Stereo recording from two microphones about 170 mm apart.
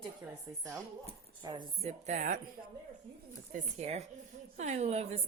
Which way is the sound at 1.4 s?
25° right (ahead or behind).